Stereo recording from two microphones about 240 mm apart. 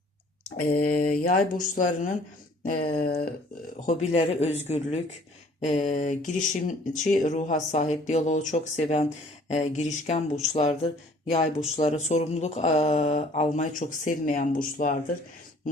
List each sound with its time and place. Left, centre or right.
0.6 s speech: left